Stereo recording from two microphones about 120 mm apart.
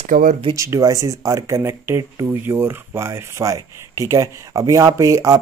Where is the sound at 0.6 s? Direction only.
30° right (ahead or behind).